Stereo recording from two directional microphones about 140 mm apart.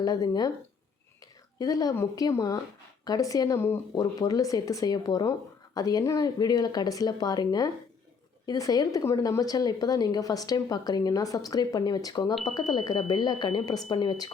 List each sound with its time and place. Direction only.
0.0 s a woman's voice: 30° left (ahead or behind)
1.5 s a woman's voice: 25° left (ahead or behind)
12.3 s speech: centre (ahead or behind)
12.5 s a woman's voice: 30° left (ahead or behind)